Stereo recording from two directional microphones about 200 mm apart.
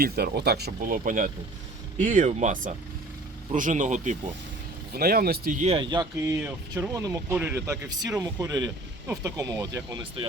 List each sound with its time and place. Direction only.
0.0 s speech: 50° right (ahead or behind)
4.9 s speech: 50° right (ahead or behind); by 10.2 s 20° right (ahead or behind)